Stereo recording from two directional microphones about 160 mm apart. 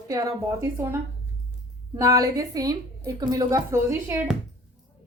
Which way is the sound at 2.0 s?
20° right (ahead or behind).